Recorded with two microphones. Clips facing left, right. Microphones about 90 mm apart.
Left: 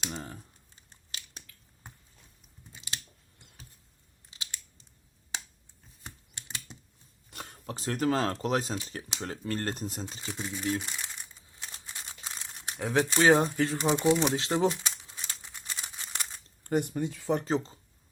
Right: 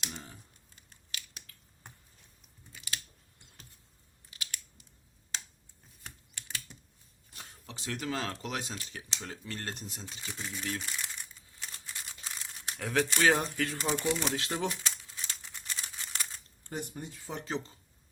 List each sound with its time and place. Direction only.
0.1 s computer keyboard: 50° left (ahead or behind)
0.8 s crushing: 30° left (ahead or behind)
2.7 s scissors: 25° left (ahead or behind)
4.3 s a sound: 25° left (ahead or behind)
6.1 s typing: 25° left (ahead or behind)
7.3 s a sound: 60° left (ahead or behind)
7.8 s speech: 40° left (ahead or behind)
10.2 s crumpling: 20° left (ahead or behind)
13.7 s speech: 20° left (ahead or behind)
14.8 s scissors: 15° left (ahead or behind)
16.6 s speech: 65° left (ahead or behind)
17.4 s speech: 35° left (ahead or behind)